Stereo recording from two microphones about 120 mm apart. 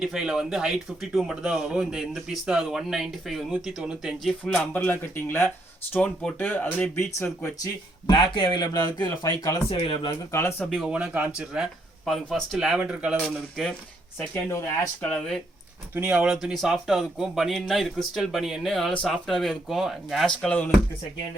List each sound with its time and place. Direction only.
0.0 s speech: 5° right (ahead or behind); by 7.3 s 15° left (ahead or behind)
7.4 s speech: 30° left (ahead or behind)
9.6 s speech: 45° left (ahead or behind)
10.1 s speech: 20° left (ahead or behind)
10.7 s speech: 5° right (ahead or behind)
13.2 s speech: centre (ahead or behind)
15.0 s speech: 10° left (ahead or behind)
16.0 s speech: 10° right (ahead or behind)